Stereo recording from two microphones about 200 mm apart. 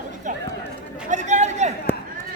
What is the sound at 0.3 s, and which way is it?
Run, 40° right (ahead or behind).